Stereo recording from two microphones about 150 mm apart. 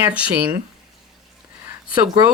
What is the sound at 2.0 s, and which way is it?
Speech, 30° right (ahead or behind).